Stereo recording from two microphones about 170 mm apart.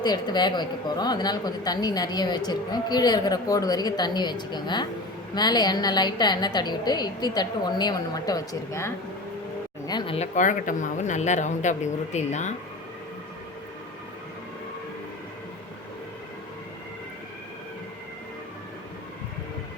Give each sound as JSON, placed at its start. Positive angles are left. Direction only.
{"t": 0.0, "sound": "speech", "side_deg": 25}
{"t": 10.2, "sound": "a woman's voice", "side_deg": 50}